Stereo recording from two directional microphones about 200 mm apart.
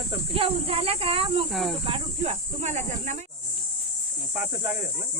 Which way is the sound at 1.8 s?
30° right (ahead or behind).